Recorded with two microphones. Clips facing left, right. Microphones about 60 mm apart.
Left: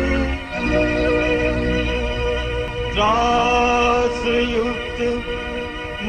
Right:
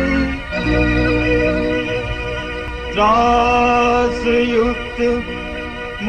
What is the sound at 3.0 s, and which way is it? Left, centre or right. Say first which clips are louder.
Music: right 4 dB; right.